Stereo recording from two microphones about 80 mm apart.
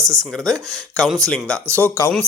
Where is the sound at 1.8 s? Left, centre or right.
Left.